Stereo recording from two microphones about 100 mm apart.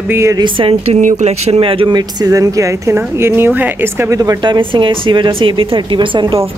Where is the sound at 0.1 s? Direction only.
30° right (ahead or behind).